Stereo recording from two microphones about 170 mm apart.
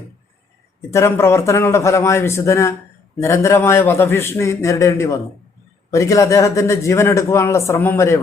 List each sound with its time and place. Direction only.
0.9 s a man's voice: 15° left (ahead or behind)